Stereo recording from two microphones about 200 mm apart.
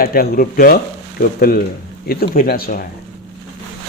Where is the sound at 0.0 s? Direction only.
45° left (ahead or behind).